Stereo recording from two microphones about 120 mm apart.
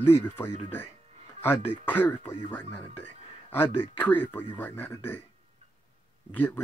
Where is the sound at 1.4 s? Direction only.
15° left (ahead or behind).